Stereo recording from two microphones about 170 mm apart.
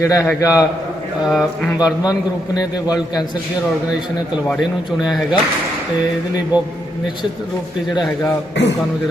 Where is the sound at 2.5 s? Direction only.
20° left (ahead or behind).